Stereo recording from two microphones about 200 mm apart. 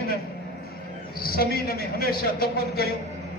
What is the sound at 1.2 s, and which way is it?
A man's voice, 50° left (ahead or behind).